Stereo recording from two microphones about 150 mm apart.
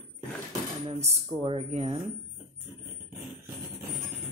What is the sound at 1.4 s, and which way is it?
Speech, 35° right (ahead or behind).